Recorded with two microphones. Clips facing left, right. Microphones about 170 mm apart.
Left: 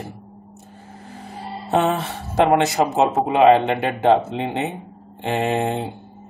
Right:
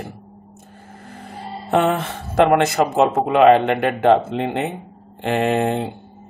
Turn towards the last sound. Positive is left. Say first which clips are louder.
# right 3 dB
turn(degrees=-60)  # may be behind; listen again after turning